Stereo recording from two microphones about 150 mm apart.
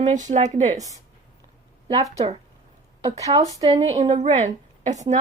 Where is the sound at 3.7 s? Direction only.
45° right (ahead or behind).